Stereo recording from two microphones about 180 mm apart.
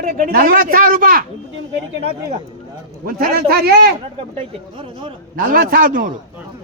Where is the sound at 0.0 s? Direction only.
55° right (ahead or behind).